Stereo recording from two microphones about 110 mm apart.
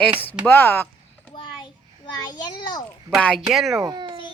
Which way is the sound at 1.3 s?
45° left (ahead or behind).